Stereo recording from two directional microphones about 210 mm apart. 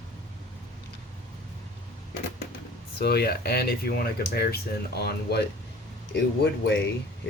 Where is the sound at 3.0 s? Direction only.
50° left (ahead or behind).